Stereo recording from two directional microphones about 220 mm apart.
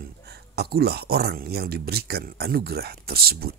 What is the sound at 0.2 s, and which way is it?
Speech, 45° right (ahead or behind).